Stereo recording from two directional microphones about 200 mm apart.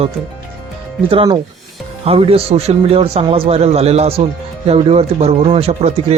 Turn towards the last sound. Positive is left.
turn(degrees=-30)  # may be behind; listen again after turning